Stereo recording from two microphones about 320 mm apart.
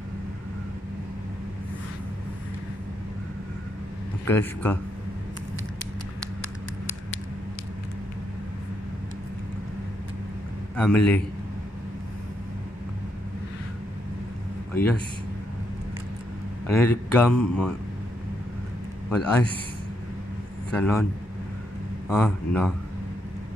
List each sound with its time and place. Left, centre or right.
4.3 s speech: centre
10.8 s speech: centre
16.6 s speech: centre
19.0 s speech: centre
20.7 s speech: centre
22.1 s speech: centre